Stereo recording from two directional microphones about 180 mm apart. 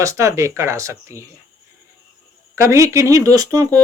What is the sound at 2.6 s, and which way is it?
Speech, 15° right (ahead or behind).